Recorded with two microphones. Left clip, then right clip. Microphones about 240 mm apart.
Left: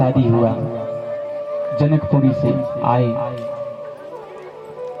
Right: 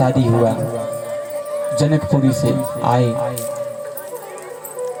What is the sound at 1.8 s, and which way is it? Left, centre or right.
Speech, right.